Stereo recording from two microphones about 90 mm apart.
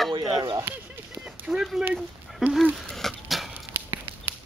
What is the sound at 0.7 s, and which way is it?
Speech, 25° right (ahead or behind).